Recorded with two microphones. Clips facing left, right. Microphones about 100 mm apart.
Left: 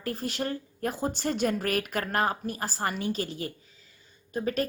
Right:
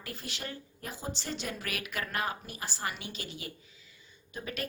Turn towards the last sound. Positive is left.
turn(degrees=40)  # may be behind; listen again after turning